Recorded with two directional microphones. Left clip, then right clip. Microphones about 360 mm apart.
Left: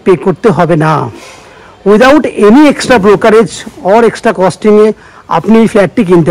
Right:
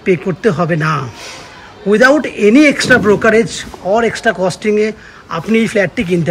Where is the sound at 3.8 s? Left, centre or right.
Left.